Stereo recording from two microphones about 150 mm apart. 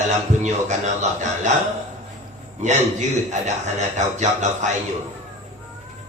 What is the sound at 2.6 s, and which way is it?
A man's voice, 50° right (ahead or behind).